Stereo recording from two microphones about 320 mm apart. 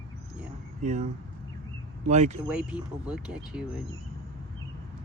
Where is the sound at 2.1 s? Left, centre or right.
Right.